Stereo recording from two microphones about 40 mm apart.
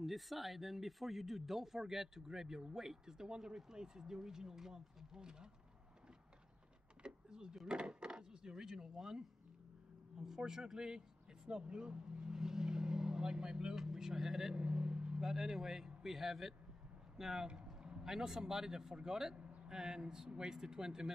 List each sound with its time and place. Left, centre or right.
0.0 s speech: centre
7.0 s power windows: right
7.6 s speech: right
10.2 s speech: centre
14.6 s vehicle: right
15.1 s speech: centre